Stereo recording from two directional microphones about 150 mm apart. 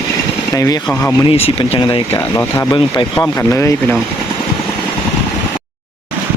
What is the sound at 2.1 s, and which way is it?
Speech, 15° left (ahead or behind).